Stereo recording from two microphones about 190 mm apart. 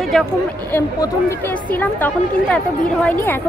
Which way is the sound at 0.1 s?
Centre (ahead or behind).